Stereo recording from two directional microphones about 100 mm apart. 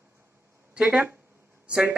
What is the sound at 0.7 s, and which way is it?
A man's voice, 15° right (ahead or behind).